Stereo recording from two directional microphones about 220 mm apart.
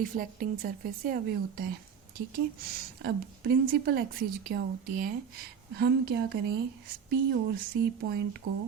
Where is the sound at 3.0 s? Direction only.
45° right (ahead or behind).